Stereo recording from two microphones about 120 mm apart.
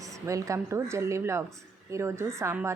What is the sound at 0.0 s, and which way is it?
Speech, 25° right (ahead or behind).